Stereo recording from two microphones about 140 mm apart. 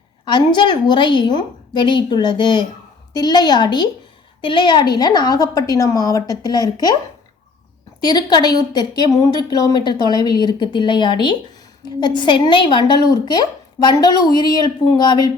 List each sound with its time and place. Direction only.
0.3 s a woman's voice: 35° left (ahead or behind)
8.0 s a woman's voice: 30° left (ahead or behind)